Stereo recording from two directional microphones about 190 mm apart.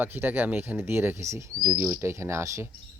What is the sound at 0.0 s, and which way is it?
Speech, 10° right (ahead or behind).